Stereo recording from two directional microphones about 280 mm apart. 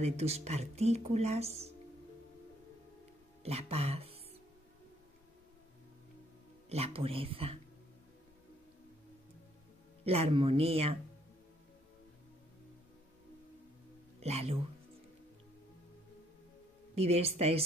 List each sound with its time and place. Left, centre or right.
0.0 s speech: right
3.4 s speech: right
6.7 s speech: right
10.0 s speech: right
14.2 s speech: right
16.9 s speech: right